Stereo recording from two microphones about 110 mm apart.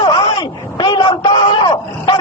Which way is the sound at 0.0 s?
40° left (ahead or behind).